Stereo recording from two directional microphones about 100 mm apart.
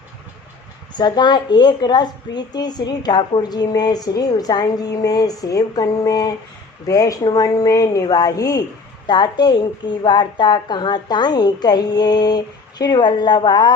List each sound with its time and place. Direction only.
0.9 s a woman's voice: 45° left (ahead or behind)